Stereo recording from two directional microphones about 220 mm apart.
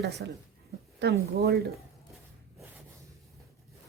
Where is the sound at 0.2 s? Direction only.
50° right (ahead or behind).